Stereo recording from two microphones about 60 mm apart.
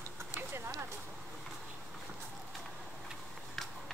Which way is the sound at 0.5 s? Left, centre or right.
Right.